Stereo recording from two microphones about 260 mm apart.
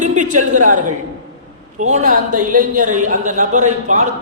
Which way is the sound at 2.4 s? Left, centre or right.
Right.